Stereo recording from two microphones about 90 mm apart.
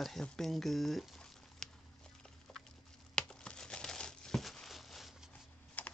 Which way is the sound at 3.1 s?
10° left (ahead or behind).